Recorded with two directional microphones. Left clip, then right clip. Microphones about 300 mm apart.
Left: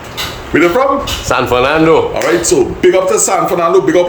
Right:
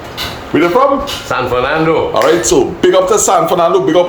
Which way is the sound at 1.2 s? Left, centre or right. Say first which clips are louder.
Left 3 dB; left.